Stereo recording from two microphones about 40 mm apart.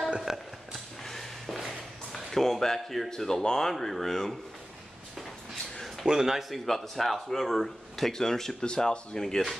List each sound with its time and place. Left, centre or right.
0.3 s speech: centre
0.7 s a sound: centre
3.1 s speech: centre
6.0 s speech: centre
6.5 s speech: centre